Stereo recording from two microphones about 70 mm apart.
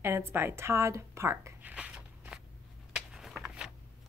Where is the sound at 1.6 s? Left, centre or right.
Right.